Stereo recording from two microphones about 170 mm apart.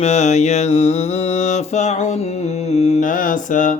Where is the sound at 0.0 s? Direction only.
40° left (ahead or behind).